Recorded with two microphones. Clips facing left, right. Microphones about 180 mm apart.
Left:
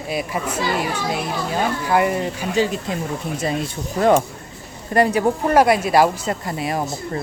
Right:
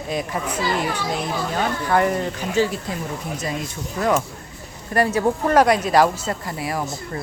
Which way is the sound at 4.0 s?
30° left (ahead or behind).